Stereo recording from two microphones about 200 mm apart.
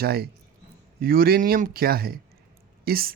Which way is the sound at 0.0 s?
50° right (ahead or behind).